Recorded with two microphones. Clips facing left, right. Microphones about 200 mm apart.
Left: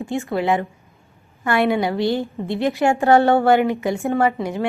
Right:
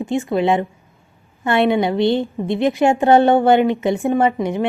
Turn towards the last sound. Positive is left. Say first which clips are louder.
# right 2 dB
turn(degrees=-20)  # may be behind; listen again after turning